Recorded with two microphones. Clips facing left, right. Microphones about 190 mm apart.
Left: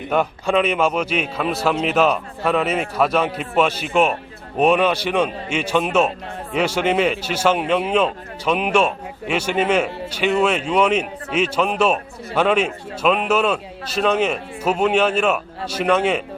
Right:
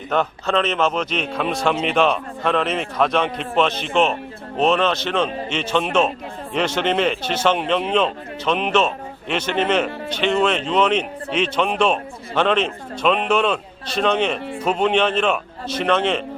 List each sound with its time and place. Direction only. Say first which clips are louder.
0.1 s a man's voice: left 1 dB; 10° left (ahead or behind)